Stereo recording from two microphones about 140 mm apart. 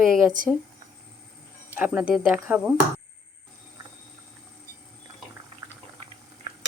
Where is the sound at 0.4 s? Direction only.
70° right (ahead or behind).